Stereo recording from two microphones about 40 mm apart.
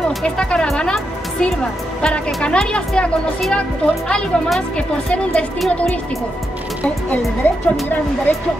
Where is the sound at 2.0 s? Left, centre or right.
Left.